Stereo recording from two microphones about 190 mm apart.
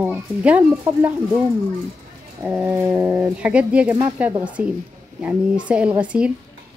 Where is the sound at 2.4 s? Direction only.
10° right (ahead or behind).